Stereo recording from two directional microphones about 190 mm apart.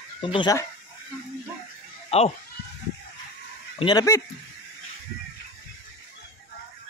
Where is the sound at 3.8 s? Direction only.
20° left (ahead or behind).